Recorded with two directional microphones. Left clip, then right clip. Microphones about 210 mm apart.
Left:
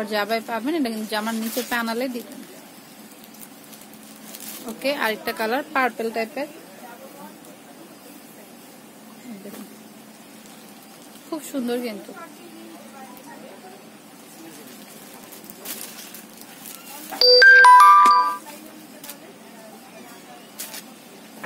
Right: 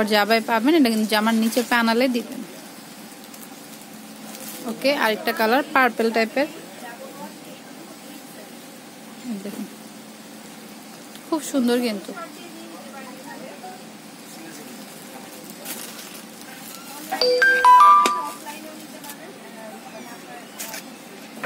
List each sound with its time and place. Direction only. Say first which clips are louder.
0.0 s speech: right 5 dB; 30° right (ahead or behind)
4.8 s speech: right 3 dB; 15° right (ahead or behind); by 6.5 s 30° right (ahead or behind)
11.2 s speech: right 6 dB; 20° right (ahead or behind)
17.2 s music: left 6 dB; 40° left (ahead or behind)